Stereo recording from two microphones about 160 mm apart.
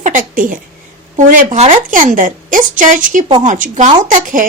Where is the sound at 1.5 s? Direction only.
40° right (ahead or behind).